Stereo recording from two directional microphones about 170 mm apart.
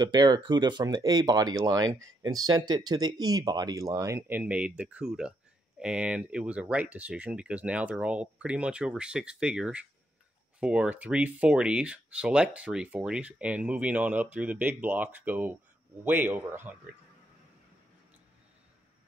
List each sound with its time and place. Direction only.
0.0 s speech: 25° right (ahead or behind); by 16.7 s 10° right (ahead or behind)